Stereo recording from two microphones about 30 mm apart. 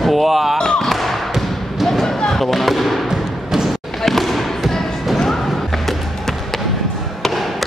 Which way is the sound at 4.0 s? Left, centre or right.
Centre.